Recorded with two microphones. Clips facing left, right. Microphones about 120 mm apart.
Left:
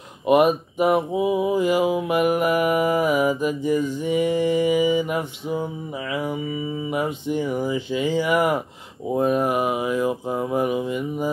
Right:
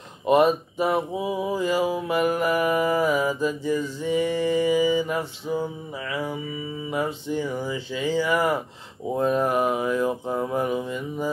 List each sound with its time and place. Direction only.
0.3 s mantra: 15° left (ahead or behind)
6.9 s mantra: 15° left (ahead or behind)